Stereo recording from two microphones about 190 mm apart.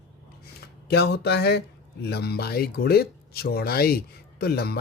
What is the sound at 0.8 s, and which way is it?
Speech, 60° left (ahead or behind).